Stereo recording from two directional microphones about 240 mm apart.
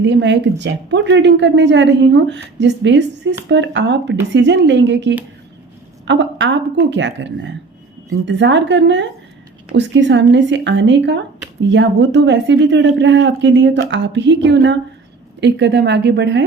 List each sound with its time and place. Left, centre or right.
0.0 s a woman's voice: right